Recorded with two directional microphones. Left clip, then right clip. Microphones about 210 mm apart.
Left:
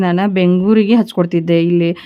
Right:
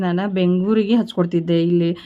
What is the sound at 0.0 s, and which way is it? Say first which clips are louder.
Speech: left 6 dB; 35° left (ahead or behind).